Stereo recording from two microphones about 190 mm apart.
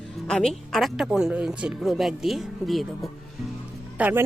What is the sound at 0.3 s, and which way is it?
Speech, centre (ahead or behind).